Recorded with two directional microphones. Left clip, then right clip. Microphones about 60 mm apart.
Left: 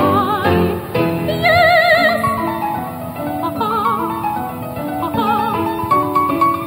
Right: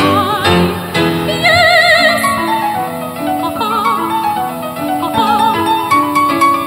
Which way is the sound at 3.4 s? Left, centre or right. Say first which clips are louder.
Right 1 dB; centre.